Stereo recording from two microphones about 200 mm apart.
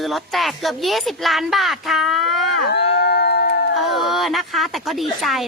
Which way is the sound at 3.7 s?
Centre (ahead or behind).